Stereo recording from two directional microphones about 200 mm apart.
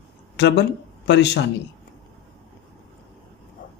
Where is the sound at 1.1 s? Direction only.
60° left (ahead or behind).